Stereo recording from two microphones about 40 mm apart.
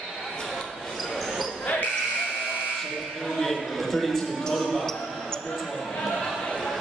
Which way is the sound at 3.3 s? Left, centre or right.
Centre.